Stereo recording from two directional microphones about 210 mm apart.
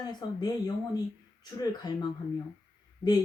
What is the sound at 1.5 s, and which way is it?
Speech, 20° left (ahead or behind).